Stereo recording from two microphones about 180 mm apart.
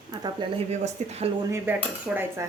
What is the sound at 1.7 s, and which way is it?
Cutlery, 10° right (ahead or behind).